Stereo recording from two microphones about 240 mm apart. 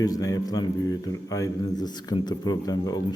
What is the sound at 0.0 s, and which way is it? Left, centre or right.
A man's voice, centre.